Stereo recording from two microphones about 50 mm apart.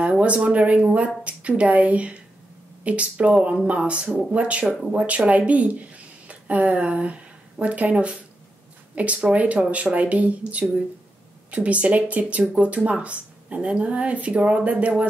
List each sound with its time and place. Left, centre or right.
0.0 s speech: right